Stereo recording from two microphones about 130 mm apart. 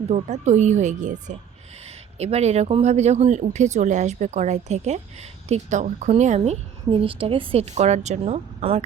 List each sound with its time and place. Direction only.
0.1 s speech: 65° right (ahead or behind)
1.8 s speech: 55° right (ahead or behind)